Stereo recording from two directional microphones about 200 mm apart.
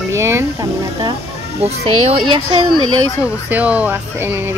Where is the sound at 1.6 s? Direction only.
30° right (ahead or behind).